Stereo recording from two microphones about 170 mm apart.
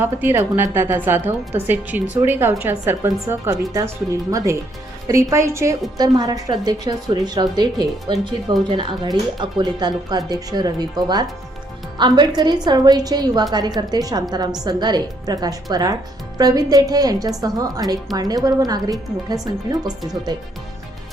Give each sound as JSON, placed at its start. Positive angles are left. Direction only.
{"t": 0.0, "sound": "speech", "side_deg": -10}